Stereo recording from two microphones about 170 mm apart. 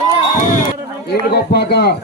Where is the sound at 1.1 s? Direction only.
70° left (ahead or behind).